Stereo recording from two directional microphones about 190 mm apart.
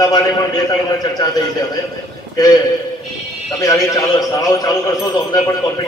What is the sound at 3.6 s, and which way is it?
A man's voice, 20° left (ahead or behind).